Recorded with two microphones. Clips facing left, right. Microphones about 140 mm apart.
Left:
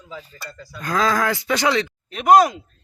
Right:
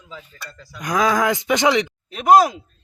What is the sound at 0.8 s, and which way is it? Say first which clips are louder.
Speech: right 2 dB; 15° right (ahead or behind).